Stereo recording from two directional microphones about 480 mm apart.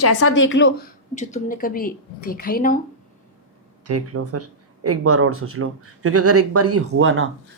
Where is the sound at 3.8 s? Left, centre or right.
Right.